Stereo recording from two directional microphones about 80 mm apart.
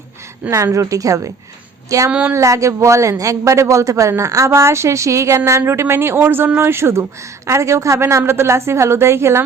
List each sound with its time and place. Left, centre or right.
0.5 s a woman's voice: right
2.0 s speech: centre
2.3 s a man's voice: right